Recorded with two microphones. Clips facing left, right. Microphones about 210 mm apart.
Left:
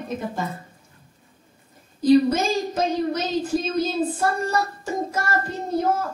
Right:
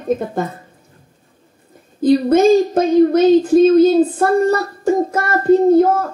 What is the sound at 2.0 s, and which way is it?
Speech, 55° right (ahead or behind).